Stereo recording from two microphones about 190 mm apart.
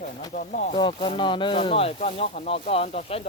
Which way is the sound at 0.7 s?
30° left (ahead or behind).